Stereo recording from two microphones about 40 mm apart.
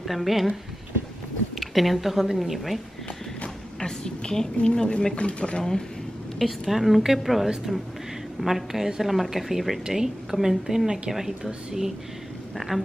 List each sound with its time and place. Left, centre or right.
0.0 s speech: centre
1.6 s a woman's voice: centre
3.8 s a woman's voice: centre
5.6 s speech: centre
6.7 s a woman's voice: centre
9.8 s a woman's voice: centre